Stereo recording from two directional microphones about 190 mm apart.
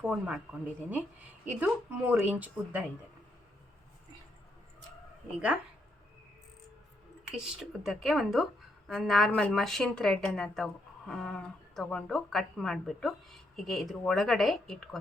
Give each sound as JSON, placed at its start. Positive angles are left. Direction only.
{"t": 0.0, "sound": "a woman's voice", "side_deg": -5}
{"t": 7.3, "sound": "a woman's voice", "side_deg": 0}